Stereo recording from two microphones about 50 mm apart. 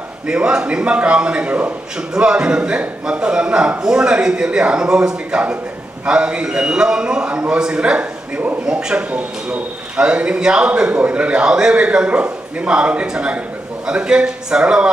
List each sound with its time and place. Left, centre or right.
0.3 s a man's voice: centre
2.0 s a man's voice: centre